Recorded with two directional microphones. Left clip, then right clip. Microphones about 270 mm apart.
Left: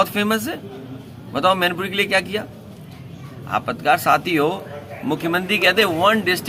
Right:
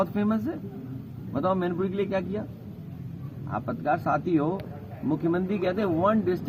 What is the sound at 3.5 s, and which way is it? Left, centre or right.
Speech, left.